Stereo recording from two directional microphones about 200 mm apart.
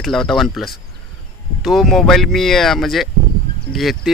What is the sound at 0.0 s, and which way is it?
Speech, centre (ahead or behind).